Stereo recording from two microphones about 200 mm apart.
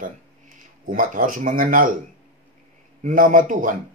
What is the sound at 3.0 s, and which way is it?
Speech, 40° right (ahead or behind).